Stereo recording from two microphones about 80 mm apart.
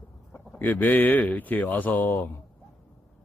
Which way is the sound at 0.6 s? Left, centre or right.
Left.